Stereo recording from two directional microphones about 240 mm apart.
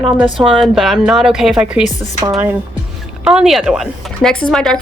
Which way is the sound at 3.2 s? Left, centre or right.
Centre.